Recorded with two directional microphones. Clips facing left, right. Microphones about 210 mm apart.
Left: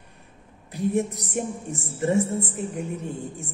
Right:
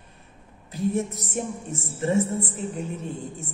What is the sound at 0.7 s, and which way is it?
Speech, 15° left (ahead or behind).